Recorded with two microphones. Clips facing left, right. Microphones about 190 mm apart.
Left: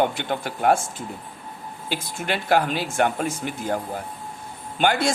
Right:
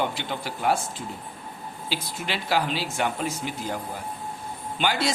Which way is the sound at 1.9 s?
55° left (ahead or behind).